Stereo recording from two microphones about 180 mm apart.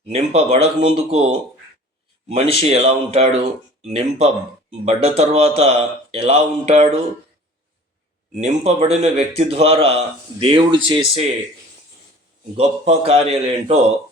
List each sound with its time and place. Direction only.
0.1 s a man's voice: 35° right (ahead or behind)
2.3 s a man's voice: 35° right (ahead or behind)
8.3 s a man's voice: 40° right (ahead or behind)
12.5 s a man's voice: 35° right (ahead or behind)